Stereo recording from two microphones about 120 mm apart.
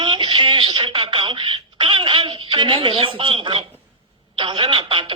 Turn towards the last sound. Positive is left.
turn(degrees=-45)  # may be behind; listen again after turning